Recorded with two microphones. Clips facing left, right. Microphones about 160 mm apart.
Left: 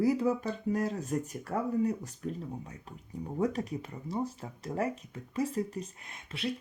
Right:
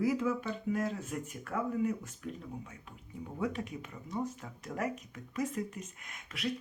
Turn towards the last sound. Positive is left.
turn(degrees=30)  # may be behind; listen again after turning